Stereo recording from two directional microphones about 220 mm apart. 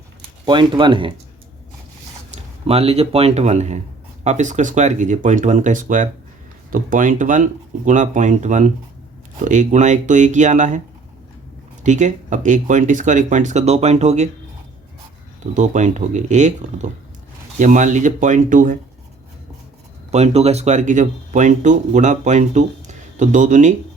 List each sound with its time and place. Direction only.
0.4 s speech: 20° right (ahead or behind)
2.3 s speech: 25° right (ahead or behind)
11.8 s speech: 35° right (ahead or behind)
15.5 s speech: 35° right (ahead or behind)
20.1 s speech: 30° right (ahead or behind)